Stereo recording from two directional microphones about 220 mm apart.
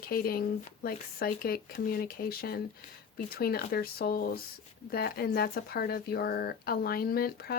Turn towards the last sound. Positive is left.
turn(degrees=45)  # may be behind; listen again after turning